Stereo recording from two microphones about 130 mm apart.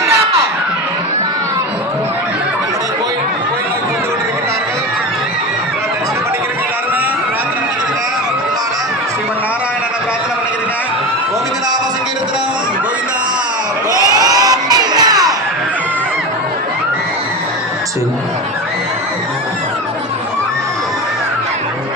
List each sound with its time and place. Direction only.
14.1 s crowd: 30° right (ahead or behind)